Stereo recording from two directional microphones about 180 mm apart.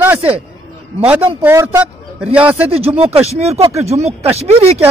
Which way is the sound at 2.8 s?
35° right (ahead or behind).